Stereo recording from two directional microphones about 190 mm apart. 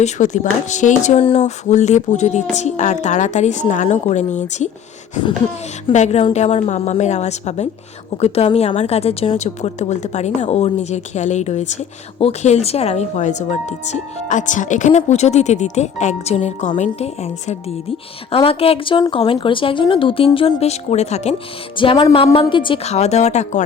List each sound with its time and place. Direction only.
0.0 s a woman's voice: 40° left (ahead or behind)
5.9 s a woman's voice: 35° left (ahead or behind)